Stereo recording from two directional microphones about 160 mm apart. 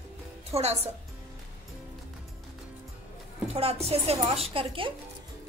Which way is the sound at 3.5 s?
40° right (ahead or behind).